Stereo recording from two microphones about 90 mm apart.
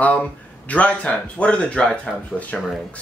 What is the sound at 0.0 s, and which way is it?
Speech, 15° left (ahead or behind).